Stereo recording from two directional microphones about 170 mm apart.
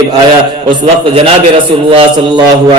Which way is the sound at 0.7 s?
30° right (ahead or behind).